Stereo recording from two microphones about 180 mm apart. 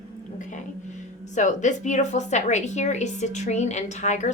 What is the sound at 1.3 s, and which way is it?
A woman's voice, 40° left (ahead or behind).